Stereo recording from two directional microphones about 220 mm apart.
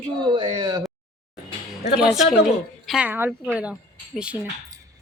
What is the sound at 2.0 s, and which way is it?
A woman's voice, centre (ahead or behind).